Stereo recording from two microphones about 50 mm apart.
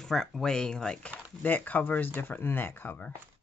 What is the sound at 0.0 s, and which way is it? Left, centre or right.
Speech, centre.